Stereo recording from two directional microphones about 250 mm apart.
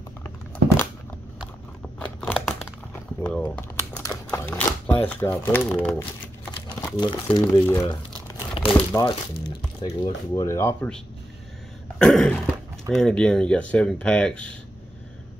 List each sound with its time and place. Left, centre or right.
0.2 s a sound: centre
1.4 s horse: centre
2.1 s crumpling: centre
3.2 s a sound: centre
6.8 s speech: centre
8.3 s crumpling: centre
8.7 s speech: centre
12.0 s speech: centre